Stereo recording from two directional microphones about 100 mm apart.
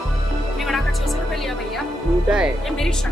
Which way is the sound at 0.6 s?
Centre (ahead or behind).